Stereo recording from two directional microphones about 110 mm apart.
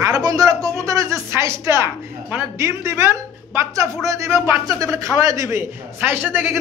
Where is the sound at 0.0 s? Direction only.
35° right (ahead or behind).